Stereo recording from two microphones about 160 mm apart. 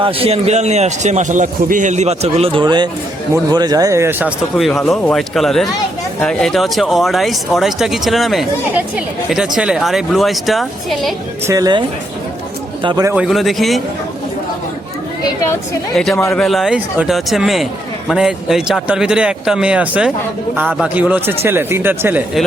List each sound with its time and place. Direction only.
0.0 s a man's voice: 35° right (ahead or behind); by 4.3 s 15° right (ahead or behind)
4.5 s speech: centre (ahead or behind)
11.4 s speech: 25° right (ahead or behind)
13.2 s speech: centre (ahead or behind)
16.0 s speech: 5° left (ahead or behind); by 22.2 s 15° right (ahead or behind)